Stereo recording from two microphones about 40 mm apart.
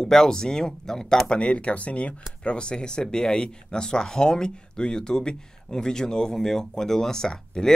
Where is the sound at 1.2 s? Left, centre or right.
Left.